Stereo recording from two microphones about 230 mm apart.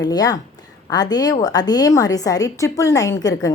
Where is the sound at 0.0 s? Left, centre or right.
Centre.